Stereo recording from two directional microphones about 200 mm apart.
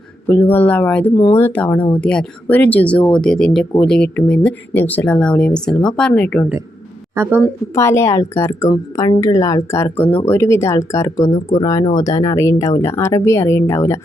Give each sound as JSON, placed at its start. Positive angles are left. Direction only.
{"t": 0.3, "sound": "speech", "side_deg": 10}
{"t": 7.2, "sound": "speech", "side_deg": -10}
{"t": 7.8, "sound": "speech", "side_deg": 15}